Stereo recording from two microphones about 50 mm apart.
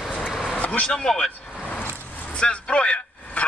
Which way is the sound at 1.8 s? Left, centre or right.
Left.